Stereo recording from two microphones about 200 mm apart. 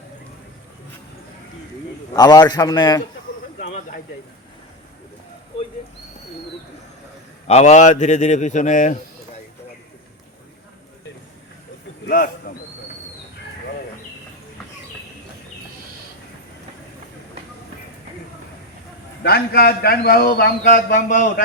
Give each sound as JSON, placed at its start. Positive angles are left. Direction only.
{"t": 2.1, "sound": "a man's voice", "side_deg": 20}
{"t": 7.4, "sound": "speech", "side_deg": 35}
{"t": 12.0, "sound": "speech", "side_deg": 45}
{"t": 19.2, "sound": "a man's voice", "side_deg": 50}